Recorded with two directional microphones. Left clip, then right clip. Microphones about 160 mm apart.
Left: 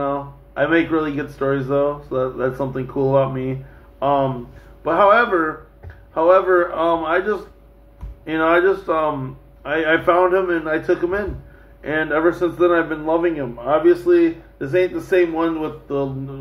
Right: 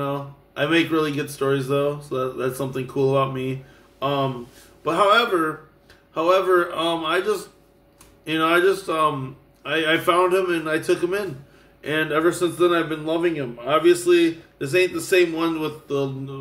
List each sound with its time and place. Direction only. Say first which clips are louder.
0.0 s a man's voice: left 5 dB; 40° right (ahead or behind)